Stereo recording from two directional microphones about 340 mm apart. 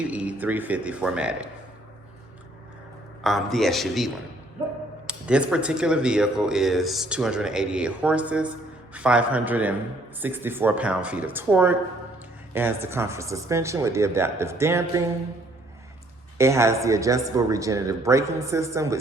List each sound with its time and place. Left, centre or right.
0.0 s speech: centre
3.2 s speech: centre
16.4 s speech: centre